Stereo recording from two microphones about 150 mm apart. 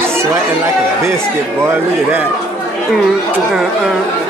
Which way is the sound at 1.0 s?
15° right (ahead or behind).